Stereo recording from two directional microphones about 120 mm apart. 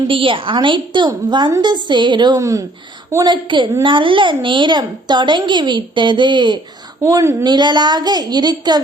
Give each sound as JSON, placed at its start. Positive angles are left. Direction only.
{"t": 0.1, "sound": "a child's voice", "side_deg": -45}
{"t": 3.2, "sound": "a child's voice", "side_deg": -40}
{"t": 7.0, "sound": "a woman's voice", "side_deg": -25}
{"t": 7.4, "sound": "a child's voice", "side_deg": -40}